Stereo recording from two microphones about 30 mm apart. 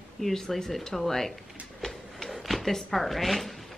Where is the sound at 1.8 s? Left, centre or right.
Centre.